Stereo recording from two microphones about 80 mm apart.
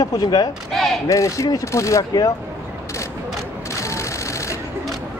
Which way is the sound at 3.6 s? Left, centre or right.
Left.